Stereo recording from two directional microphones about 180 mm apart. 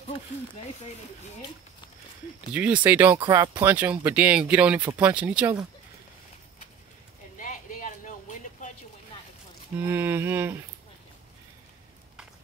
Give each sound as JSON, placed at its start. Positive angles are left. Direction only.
{"t": 2.5, "sound": "speech", "side_deg": -10}
{"t": 7.3, "sound": "a sound", "side_deg": 45}
{"t": 9.8, "sound": "speech", "side_deg": -10}